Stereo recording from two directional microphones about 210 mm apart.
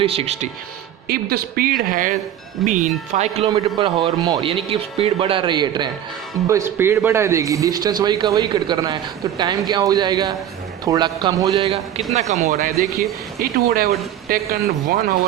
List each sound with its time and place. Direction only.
0.0 s speech: 25° right (ahead or behind)
1.0 s a man's voice: 45° right (ahead or behind)